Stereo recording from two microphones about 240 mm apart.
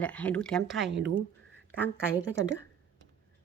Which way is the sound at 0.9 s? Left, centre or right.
Right.